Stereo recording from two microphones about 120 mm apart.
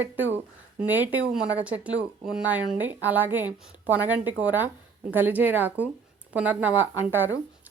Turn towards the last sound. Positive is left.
turn(degrees=-15)  # may be behind; listen again after turning